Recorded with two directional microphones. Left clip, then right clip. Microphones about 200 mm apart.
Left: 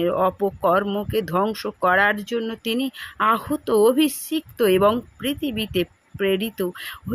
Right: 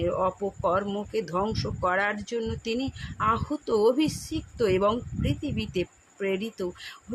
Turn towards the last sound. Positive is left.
turn(degrees=25)  # may be behind; listen again after turning